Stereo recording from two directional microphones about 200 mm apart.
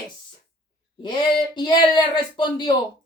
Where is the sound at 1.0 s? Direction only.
25° left (ahead or behind).